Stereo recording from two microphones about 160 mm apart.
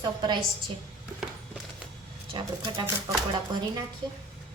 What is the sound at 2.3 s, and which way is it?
Speech, 30° right (ahead or behind).